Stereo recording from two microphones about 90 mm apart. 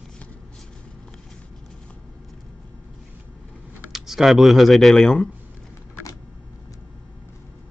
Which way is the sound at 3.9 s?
5° right (ahead or behind).